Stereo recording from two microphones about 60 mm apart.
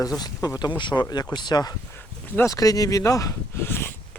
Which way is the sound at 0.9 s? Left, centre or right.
Left.